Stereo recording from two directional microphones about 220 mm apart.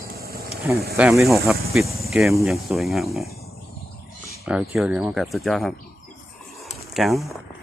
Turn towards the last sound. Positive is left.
turn(degrees=0)  # may be behind; listen again after turning